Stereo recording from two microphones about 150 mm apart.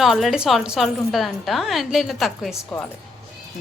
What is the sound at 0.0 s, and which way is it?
A woman's voice, centre (ahead or behind).